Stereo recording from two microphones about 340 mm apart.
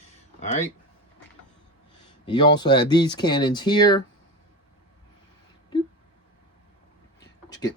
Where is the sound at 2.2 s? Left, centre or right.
Centre.